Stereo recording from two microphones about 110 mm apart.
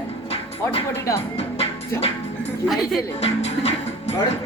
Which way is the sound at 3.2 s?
75° left (ahead or behind).